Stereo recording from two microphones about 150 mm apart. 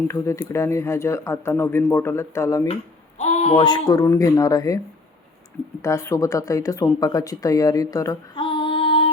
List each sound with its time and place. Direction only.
0.1 s speech: 20° left (ahead or behind)
3.2 s a sound: 45° left (ahead or behind)
3.6 s speech: 30° left (ahead or behind)
5.8 s speech: 20° left (ahead or behind)
8.4 s female singing: 35° left (ahead or behind)